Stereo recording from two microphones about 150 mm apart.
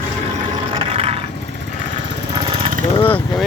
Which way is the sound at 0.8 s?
40° right (ahead or behind).